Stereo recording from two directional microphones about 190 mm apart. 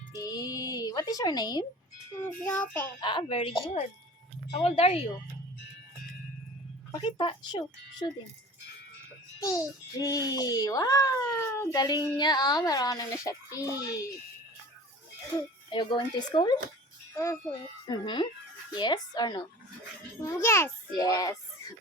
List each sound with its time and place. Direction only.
0.2 s a sound: 20° left (ahead or behind)
2.1 s a child's voice: 5° left (ahead or behind)
3.0 s speech: 25° left (ahead or behind)
7.0 s speech: 25° left (ahead or behind)
9.4 s a child's voice: 15° left (ahead or behind)
15.4 s a child's voice: 25° left (ahead or behind)